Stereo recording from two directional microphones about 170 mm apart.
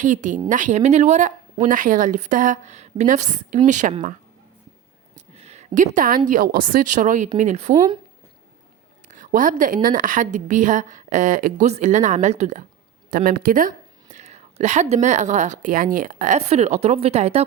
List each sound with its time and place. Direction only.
0.0 s a woman's voice: 45° right (ahead or behind)
5.1 s a sound: 40° right (ahead or behind)
6.7 s a woman's voice: 50° right (ahead or behind)
9.0 s a woman's voice: 50° right (ahead or behind)
13.1 s a woman's voice: 60° right (ahead or behind); by 17.4 s 40° right (ahead or behind)